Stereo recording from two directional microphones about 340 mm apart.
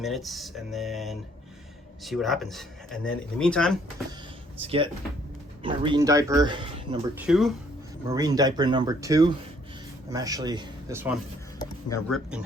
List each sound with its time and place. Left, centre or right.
0.0 s speech: centre
4.6 s speech: centre
11.6 s speech: centre